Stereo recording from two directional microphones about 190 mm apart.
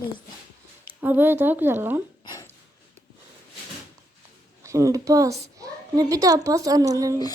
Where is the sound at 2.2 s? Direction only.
20° left (ahead or behind).